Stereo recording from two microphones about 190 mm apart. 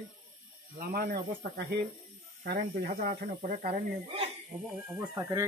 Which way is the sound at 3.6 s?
30° right (ahead or behind).